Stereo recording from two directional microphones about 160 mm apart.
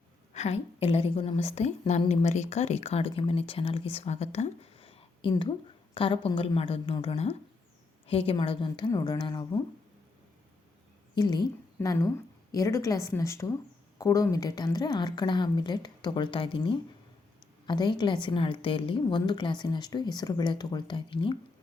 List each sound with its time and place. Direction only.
0.3 s a woman's voice: 45° left (ahead or behind); by 9.6 s 25° left (ahead or behind)
11.1 s a woman's voice: 25° left (ahead or behind)